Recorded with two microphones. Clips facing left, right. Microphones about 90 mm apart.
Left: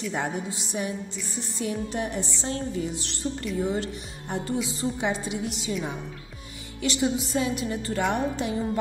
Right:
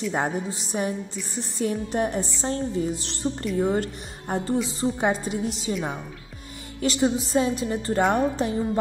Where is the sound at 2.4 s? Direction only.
35° right (ahead or behind).